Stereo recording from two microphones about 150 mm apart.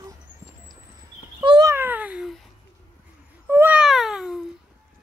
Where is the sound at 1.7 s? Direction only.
15° right (ahead or behind).